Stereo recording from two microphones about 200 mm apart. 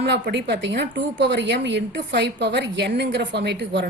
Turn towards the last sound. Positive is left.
turn(degrees=-55)  # may be behind; listen again after turning